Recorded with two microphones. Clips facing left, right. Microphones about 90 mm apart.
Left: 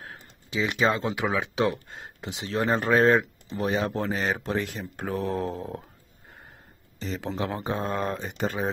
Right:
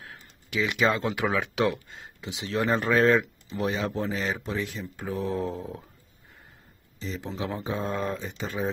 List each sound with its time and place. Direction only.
0.5 s speech: 30° left (ahead or behind)
1.9 s speech: 50° left (ahead or behind)
2.4 s speech: 35° left (ahead or behind)
3.9 s speech: 55° left (ahead or behind)
7.0 s speech: 65° left (ahead or behind)